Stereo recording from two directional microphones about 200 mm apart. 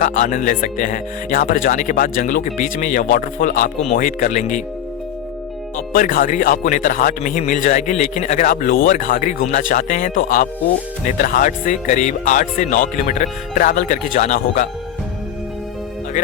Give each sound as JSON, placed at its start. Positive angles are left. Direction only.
{"t": 0.0, "sound": "speech", "side_deg": 40}
{"t": 5.7, "sound": "speech", "side_deg": 45}